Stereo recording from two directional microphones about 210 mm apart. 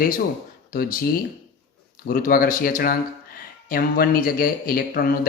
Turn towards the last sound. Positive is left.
turn(degrees=45)  # may be behind; listen again after turning